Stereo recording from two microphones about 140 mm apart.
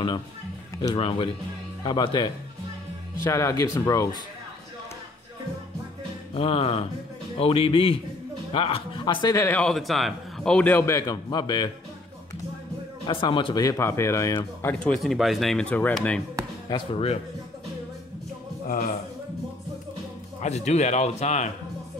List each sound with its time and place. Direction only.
0.9 s speech: 40° left (ahead or behind)
3.3 s speech: 20° left (ahead or behind)
6.3 s speech: 45° left (ahead or behind); by 9.6 s 20° left (ahead or behind)
9.6 s speech: 5° left (ahead or behind); by 11.7 s 30° left (ahead or behind)
13.0 s speech: 40° left (ahead or behind)
13.7 s speech: 20° left (ahead or behind)
16.6 s speech: 35° left (ahead or behind)
20.3 s speech: 50° left (ahead or behind)